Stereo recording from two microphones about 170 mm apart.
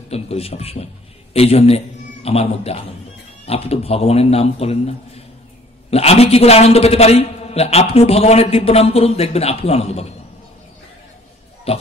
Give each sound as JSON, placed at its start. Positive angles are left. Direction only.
{"t": 0.1, "sound": "a man's voice", "side_deg": 35}
{"t": 11.7, "sound": "a man's voice", "side_deg": 35}